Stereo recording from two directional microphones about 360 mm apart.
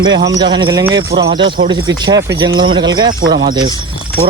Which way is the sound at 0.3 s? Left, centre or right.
Centre.